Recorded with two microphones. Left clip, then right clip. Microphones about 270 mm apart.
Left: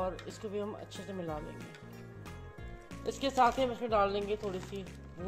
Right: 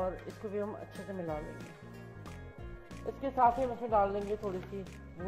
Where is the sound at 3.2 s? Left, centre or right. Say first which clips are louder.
Even; left.